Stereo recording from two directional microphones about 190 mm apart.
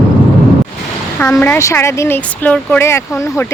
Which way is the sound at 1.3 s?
10° left (ahead or behind).